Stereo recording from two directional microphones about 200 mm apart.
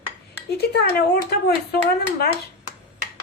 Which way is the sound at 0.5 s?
55° left (ahead or behind).